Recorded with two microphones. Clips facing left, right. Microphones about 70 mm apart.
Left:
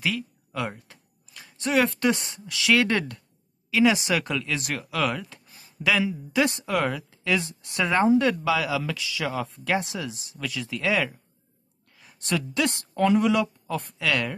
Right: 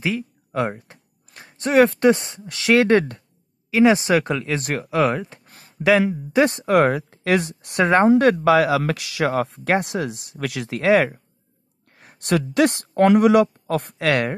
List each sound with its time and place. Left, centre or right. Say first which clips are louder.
0.5 s a sound: right 8 dB; right
2.0 s speech: right 8 dB; right
5.4 s a sound: right 6 dB; right
5.9 s speech: right 7 dB; right
7.8 s speech: right 6 dB; right
10.4 s speech: right 6 dB; right
14.0 s speech: right 6 dB; right